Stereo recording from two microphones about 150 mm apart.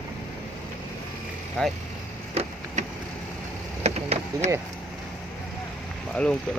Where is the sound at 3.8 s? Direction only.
45° right (ahead or behind).